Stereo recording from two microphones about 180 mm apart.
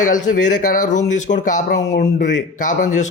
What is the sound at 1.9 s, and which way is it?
Speech, 65° left (ahead or behind).